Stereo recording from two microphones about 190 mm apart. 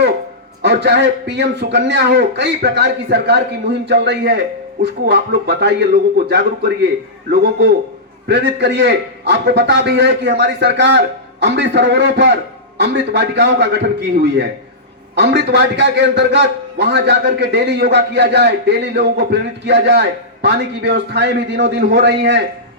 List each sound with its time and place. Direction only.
0.6 s a man's voice: 60° right (ahead or behind)